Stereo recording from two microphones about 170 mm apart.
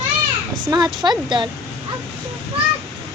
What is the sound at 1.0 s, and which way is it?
Speech, 30° right (ahead or behind).